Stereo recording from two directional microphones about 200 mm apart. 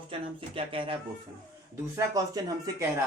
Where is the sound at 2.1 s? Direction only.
20° right (ahead or behind).